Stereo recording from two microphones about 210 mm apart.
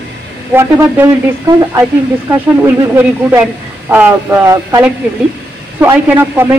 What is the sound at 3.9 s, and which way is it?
A man's voice, 10° right (ahead or behind).